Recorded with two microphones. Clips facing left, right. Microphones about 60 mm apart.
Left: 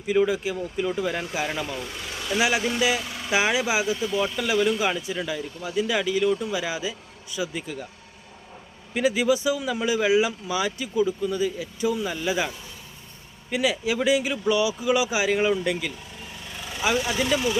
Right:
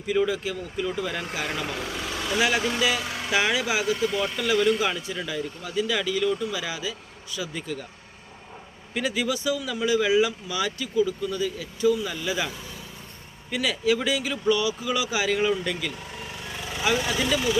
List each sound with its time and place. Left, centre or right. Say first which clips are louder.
0.1 s speech: left 2 dB; centre
1.6 s speech: right 2 dB; right
2.4 s speech: left 1 dB; centre
9.0 s speech: left 5 dB; centre
13.5 s speech: even; centre